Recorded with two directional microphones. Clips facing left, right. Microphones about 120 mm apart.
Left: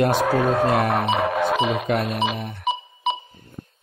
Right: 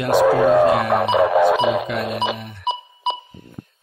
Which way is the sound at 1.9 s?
45° left (ahead or behind).